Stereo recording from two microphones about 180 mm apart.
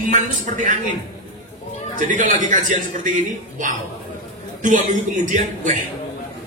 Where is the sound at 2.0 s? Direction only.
45° right (ahead or behind).